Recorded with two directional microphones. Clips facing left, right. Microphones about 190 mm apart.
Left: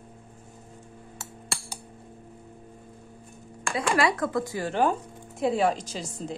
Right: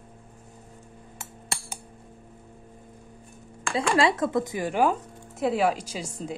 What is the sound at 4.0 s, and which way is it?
Speech, 25° right (ahead or behind).